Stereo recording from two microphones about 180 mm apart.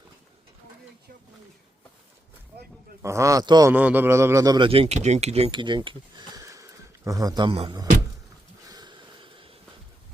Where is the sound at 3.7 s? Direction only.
10° right (ahead or behind); by 7.8 s 30° right (ahead or behind).